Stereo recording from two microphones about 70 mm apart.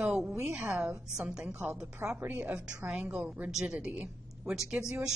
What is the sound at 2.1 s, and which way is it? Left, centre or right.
Speech, right.